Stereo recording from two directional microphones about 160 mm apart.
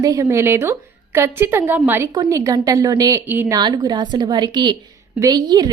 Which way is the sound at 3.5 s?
25° right (ahead or behind).